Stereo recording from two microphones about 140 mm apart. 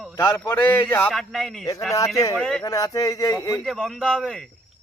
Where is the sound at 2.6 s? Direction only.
25° left (ahead or behind).